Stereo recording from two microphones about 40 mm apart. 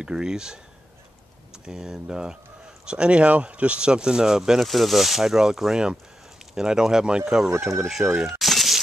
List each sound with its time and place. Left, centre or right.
0.0 s speech: centre
1.7 s speech: centre
4.6 s speech: centre
8.3 s a sound: centre